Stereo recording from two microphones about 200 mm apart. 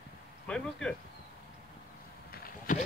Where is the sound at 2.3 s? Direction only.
45° left (ahead or behind).